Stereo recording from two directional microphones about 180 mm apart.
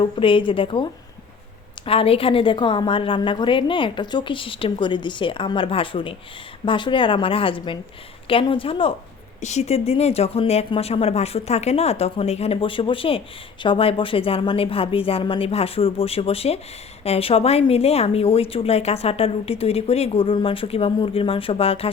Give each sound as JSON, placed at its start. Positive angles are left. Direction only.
{"t": 0.0, "sound": "a woman's voice", "side_deg": 30}